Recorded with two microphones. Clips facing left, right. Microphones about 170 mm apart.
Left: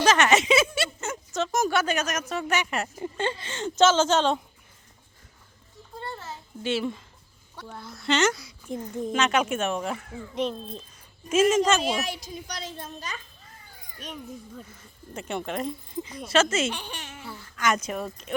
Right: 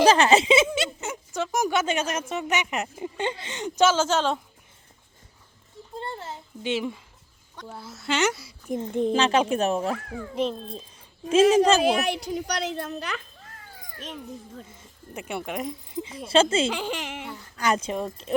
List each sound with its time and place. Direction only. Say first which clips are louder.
0.0 s a child's voice: right 3 dB; 30° right (ahead or behind)
0.8 s a sound: right 1 dB; 15° right (ahead or behind)
1.5 s a woman's voice: right 1 dB; 15° right (ahead or behind)
6.0 s a sound: right 2 dB; 25° right (ahead or behind)
7.7 s speech: left 2 dB; 5° right (ahead or behind)
8.8 s a child's voice: right 4 dB; 25° right (ahead or behind)
11.3 s a child's voice: right 3 dB; 30° right (ahead or behind)
11.9 s a child's voice: right 6 dB; 65° right (ahead or behind)
15.1 s a woman's voice: even; 10° right (ahead or behind)
16.1 s speech: right 3 dB; 30° right (ahead or behind)
16.7 s speech: right 8 dB; 90° right
17.6 s speech: right 2 dB; 30° right (ahead or behind)